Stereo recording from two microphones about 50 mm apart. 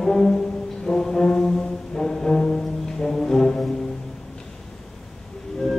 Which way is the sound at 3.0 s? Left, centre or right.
Centre.